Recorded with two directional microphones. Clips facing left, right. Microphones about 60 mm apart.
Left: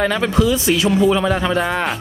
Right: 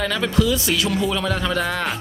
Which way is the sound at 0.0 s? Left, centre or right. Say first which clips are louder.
Left 4 dB; left.